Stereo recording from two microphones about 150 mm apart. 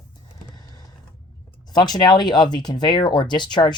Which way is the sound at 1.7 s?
30° left (ahead or behind).